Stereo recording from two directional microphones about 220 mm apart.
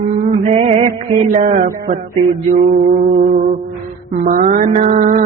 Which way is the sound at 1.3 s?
35° right (ahead or behind).